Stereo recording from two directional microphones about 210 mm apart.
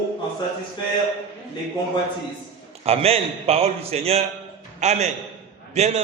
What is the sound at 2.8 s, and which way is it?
A man's voice, 30° right (ahead or behind).